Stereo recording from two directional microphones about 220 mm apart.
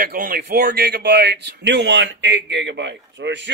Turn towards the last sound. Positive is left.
turn(degrees=-55)  # may be behind; listen again after turning